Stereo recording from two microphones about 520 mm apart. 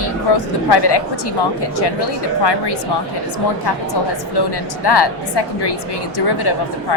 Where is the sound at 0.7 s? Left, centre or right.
Left.